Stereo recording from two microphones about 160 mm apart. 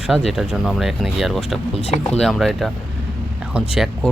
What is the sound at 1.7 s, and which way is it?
Speech, 40° left (ahead or behind).